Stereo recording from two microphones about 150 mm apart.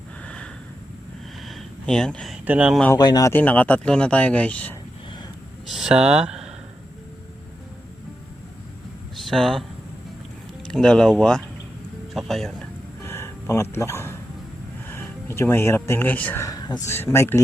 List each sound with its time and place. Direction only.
0.3 s a sound: 5° left (ahead or behind)
2.4 s speech: 10° right (ahead or behind)
3.0 s speech: 25° left (ahead or behind)
3.3 s speech: 10° left (ahead or behind)
5.6 s speech: centre (ahead or behind)
9.1 s speech: centre (ahead or behind)
10.7 s speech: 5° left (ahead or behind)
13.1 s a sound: 15° left (ahead or behind)
15.3 s speech: 15° left (ahead or behind)